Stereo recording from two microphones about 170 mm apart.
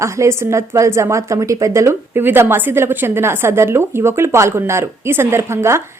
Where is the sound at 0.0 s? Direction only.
15° right (ahead or behind).